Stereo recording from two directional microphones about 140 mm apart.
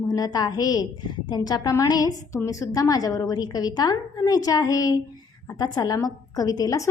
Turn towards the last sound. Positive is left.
turn(degrees=25)  # may be behind; listen again after turning